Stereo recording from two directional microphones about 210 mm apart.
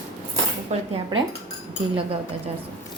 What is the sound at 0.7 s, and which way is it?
Cutlery, 30° right (ahead or behind).